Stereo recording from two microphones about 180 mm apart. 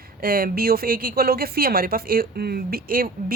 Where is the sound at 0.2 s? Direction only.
55° right (ahead or behind).